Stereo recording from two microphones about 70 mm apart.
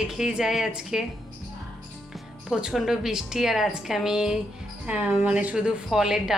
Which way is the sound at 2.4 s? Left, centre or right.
Centre.